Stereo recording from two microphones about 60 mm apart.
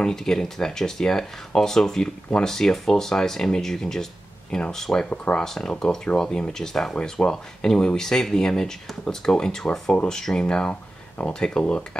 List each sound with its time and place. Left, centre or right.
0.0 s speech: centre
5.1 s speech: left
5.4 s speech: centre